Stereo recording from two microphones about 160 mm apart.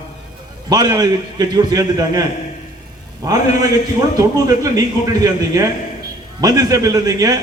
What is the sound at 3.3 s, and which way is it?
A man's voice, 20° right (ahead or behind).